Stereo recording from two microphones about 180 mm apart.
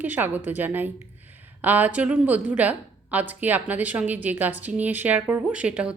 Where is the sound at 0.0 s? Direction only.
10° right (ahead or behind).